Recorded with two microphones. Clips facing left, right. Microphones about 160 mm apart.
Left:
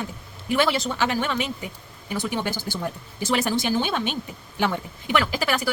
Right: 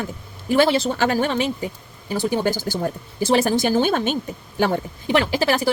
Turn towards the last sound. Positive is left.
turn(degrees=-30)  # may be behind; listen again after turning